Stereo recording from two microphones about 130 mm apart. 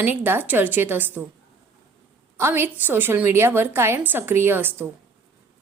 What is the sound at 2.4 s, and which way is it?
A woman's voice, 15° right (ahead or behind).